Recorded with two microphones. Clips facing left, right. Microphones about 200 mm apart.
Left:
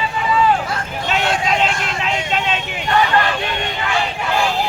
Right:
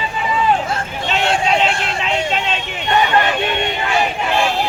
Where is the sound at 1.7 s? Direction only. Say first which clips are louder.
Right 2 dB; 30° right (ahead or behind).